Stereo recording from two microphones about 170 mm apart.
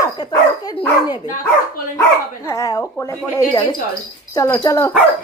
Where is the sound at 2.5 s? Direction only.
20° left (ahead or behind).